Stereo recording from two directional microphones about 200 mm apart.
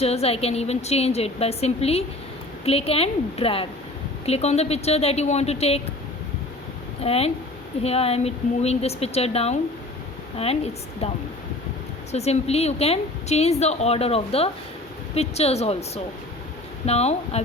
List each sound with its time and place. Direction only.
0.0 s a woman's voice: 30° left (ahead or behind)
7.0 s a woman's voice: 30° left (ahead or behind)
12.1 s a woman's voice: 30° left (ahead or behind)
16.8 s a woman's voice: 30° left (ahead or behind)